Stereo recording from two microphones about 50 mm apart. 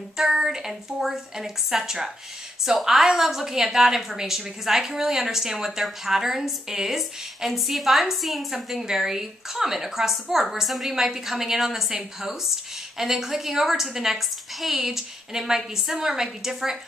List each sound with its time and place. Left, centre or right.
0.2 s a woman's voice: centre